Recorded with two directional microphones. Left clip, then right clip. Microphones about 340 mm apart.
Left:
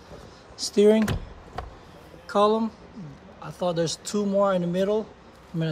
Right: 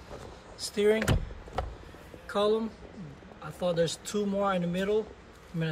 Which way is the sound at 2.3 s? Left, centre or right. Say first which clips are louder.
Left 6 dB; centre.